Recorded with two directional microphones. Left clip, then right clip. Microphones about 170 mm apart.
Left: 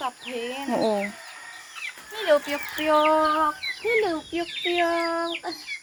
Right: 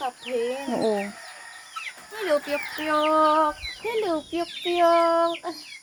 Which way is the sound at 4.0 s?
30° right (ahead or behind).